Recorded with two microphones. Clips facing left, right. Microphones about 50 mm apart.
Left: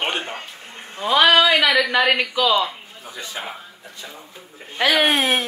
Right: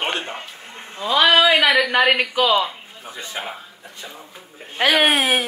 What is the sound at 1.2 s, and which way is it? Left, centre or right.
Speech, centre.